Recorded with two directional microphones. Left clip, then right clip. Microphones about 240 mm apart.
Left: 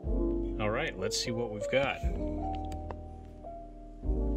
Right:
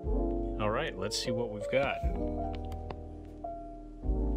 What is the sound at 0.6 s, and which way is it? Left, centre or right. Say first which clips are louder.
Speech: right 1 dB; centre.